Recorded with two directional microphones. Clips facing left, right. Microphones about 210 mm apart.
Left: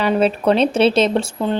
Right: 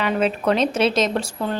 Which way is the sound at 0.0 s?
35° left (ahead or behind).